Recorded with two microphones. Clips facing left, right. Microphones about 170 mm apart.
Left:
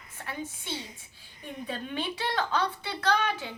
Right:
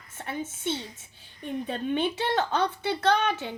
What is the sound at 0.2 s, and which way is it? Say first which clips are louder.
A woman's voice: right 4 dB; 25° right (ahead or behind).